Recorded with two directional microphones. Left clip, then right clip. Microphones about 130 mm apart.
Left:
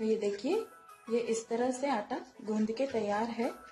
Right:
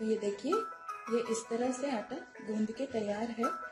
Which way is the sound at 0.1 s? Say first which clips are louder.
Even; 30° left (ahead or behind).